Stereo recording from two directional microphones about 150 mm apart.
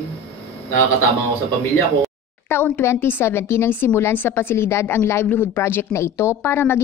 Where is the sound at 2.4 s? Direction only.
15° left (ahead or behind).